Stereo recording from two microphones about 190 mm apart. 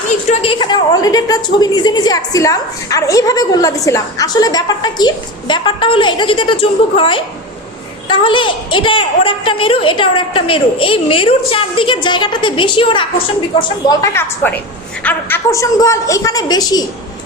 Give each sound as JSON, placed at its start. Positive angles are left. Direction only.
{"t": 0.3, "sound": "a woman's voice", "side_deg": 25}
{"t": 13.8, "sound": "a woman's voice", "side_deg": 15}